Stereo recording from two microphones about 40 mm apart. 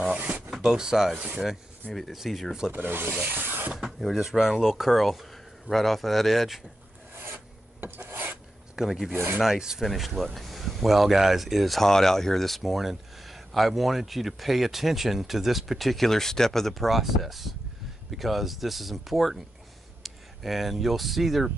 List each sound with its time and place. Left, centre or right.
0.5 s speech: centre
1.8 s speech: right
2.1 s speech: centre
2.7 s rub: right
4.0 s speech: centre
8.7 s speech: centre
9.1 s rub: right
9.4 s speech: centre
9.8 s speech: centre